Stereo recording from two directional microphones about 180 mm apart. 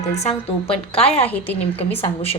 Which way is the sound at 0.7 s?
35° left (ahead or behind).